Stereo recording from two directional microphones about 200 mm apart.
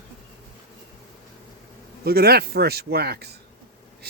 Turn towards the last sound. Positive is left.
turn(degrees=-55)  # may be behind; listen again after turning